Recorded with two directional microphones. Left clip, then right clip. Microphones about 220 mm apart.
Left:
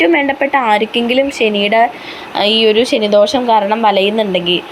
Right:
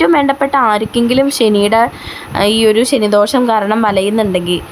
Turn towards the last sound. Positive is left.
turn(degrees=-10)  # may be behind; listen again after turning